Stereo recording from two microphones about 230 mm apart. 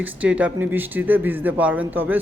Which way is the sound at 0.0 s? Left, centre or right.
Centre.